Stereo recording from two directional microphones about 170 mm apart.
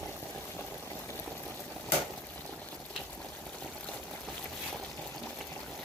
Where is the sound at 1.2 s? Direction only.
5° left (ahead or behind).